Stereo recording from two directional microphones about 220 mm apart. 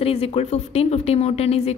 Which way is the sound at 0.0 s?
25° left (ahead or behind).